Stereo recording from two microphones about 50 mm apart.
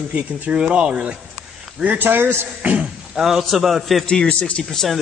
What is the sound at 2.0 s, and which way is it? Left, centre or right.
Speech, right.